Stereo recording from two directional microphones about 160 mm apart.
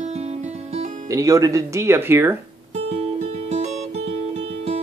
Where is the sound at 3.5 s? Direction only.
45° right (ahead or behind).